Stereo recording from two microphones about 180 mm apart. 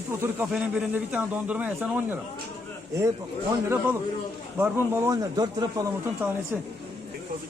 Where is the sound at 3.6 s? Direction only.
15° right (ahead or behind).